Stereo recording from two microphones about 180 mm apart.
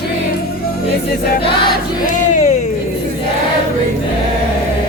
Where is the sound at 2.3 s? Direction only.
40° left (ahead or behind).